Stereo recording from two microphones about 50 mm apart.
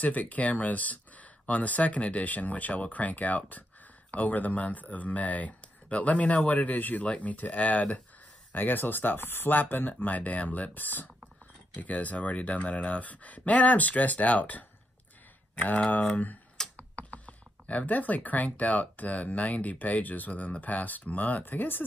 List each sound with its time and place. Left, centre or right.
0.0 s speech: left
8.5 s speech: left